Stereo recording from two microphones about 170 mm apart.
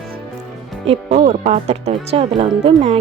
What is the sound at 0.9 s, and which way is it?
Speech, 40° right (ahead or behind).